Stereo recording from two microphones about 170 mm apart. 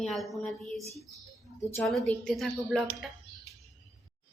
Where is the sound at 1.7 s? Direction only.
5° left (ahead or behind).